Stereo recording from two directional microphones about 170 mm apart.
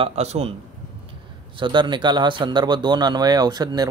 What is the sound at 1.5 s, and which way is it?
Speech, 30° right (ahead or behind).